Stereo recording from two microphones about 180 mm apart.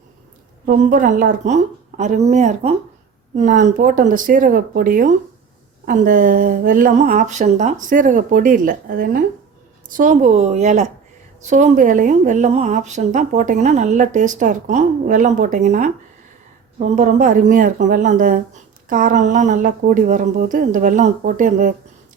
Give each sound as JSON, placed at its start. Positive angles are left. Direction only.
{"t": 0.6, "sound": "a woman's voice", "side_deg": -45}